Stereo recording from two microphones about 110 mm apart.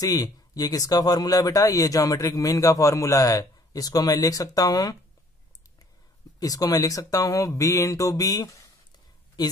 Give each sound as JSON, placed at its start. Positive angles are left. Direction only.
{"t": 0.0, "sound": "speech", "side_deg": 35}
{"t": 6.4, "sound": "speech", "side_deg": 35}